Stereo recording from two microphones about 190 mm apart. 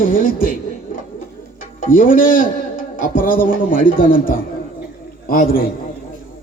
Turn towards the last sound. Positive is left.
turn(degrees=50)  # may be behind; listen again after turning